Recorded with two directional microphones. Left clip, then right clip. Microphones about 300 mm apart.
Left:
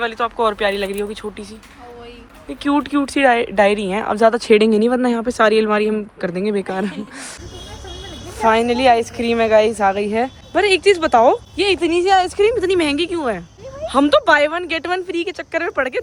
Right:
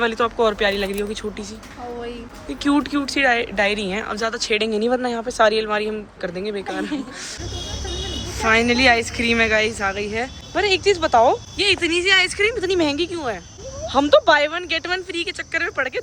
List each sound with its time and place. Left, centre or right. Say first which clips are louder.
0.0 s speech: even; centre
2.5 s a woman's voice: left 2 dB; centre
8.4 s a woman's voice: left 2 dB; centre